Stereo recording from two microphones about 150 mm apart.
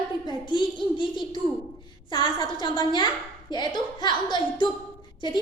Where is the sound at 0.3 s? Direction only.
30° left (ahead or behind).